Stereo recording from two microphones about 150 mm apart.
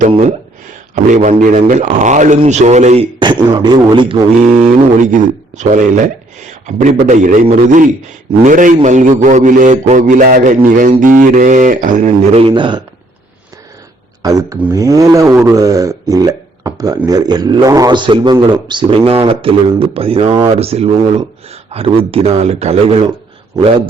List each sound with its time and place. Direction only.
1.1 s a man's voice: 55° right (ahead or behind); by 4.2 s 35° right (ahead or behind)
4.4 s a man's voice: 50° right (ahead or behind); by 12.8 s 30° right (ahead or behind)
14.2 s a man's voice: 25° right (ahead or behind); by 23.0 s 45° right (ahead or behind)